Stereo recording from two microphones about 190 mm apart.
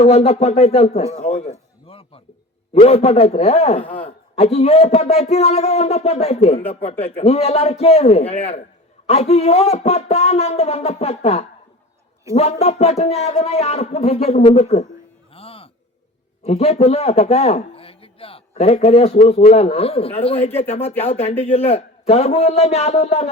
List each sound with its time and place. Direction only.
0.0 s speech: 35° left (ahead or behind)
1.3 s a sound: 30° left (ahead or behind)
2.7 s speech: 30° left (ahead or behind)
3.8 s a man's voice: 5° left (ahead or behind)
4.4 s speech: 35° left (ahead or behind)
15.3 s music: 30° left (ahead or behind)
16.4 s a man's voice: 35° left (ahead or behind)